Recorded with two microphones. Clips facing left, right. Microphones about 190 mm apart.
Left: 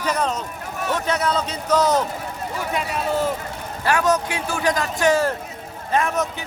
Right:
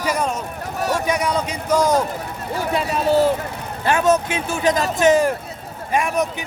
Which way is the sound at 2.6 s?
35° right (ahead or behind).